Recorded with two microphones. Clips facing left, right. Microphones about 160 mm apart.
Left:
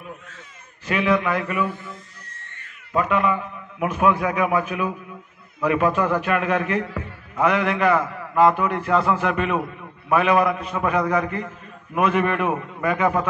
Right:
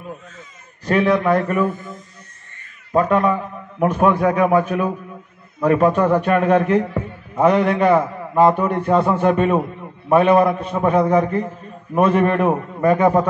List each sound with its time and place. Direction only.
0.8 s a man's voice: 35° right (ahead or behind)
2.9 s a man's voice: 40° right (ahead or behind)